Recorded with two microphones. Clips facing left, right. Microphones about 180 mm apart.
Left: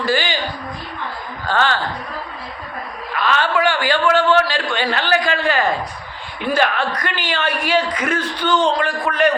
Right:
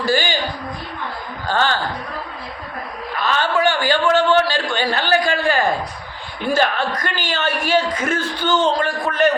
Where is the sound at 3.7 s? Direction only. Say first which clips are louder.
Even; 25° right (ahead or behind).